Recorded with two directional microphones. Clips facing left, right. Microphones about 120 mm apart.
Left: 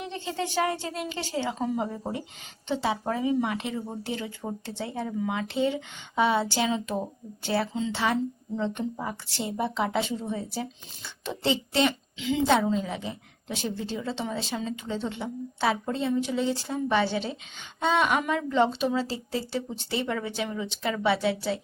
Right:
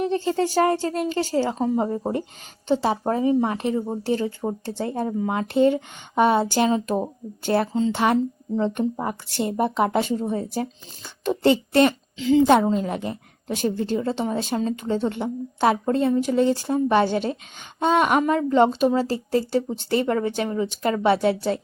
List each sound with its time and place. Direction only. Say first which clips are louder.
0.0 s a woman's voice: right 10 dB; 45° right (ahead or behind)